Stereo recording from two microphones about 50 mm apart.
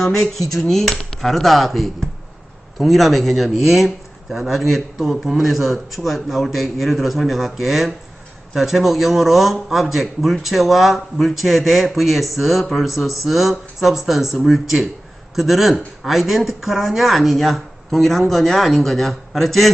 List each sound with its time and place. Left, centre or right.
0.0 s speech: centre